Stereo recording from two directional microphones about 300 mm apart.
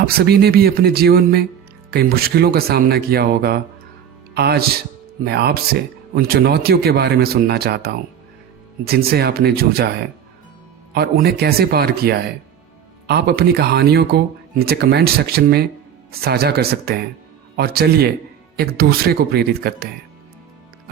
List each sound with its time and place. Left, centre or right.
0.1 s speech: right
10.9 s speech: right